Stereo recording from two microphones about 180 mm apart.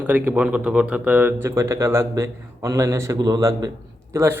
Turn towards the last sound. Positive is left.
turn(degrees=-15)  # may be behind; listen again after turning